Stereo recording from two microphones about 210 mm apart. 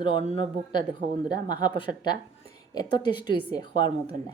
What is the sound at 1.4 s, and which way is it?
A woman's voice, 20° left (ahead or behind).